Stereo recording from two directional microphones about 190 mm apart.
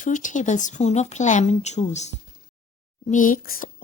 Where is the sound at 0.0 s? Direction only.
40° left (ahead or behind).